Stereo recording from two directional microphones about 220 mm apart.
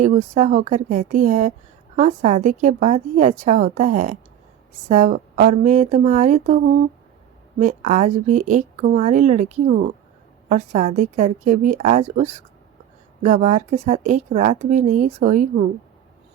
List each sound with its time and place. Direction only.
0.0 s speech: 35° right (ahead or behind)
7.6 s speech: 35° right (ahead or behind)